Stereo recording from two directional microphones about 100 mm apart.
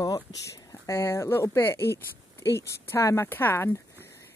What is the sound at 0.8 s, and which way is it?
Speech, 25° left (ahead or behind).